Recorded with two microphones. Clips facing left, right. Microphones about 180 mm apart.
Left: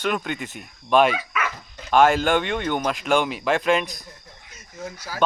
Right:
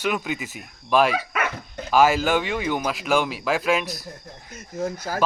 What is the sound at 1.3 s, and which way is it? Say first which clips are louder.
Dog: right 2 dB; 55° right (ahead or behind).